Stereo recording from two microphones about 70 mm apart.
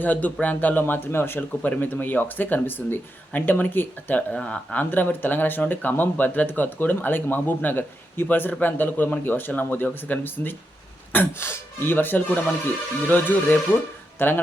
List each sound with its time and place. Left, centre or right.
0.0 s speech: left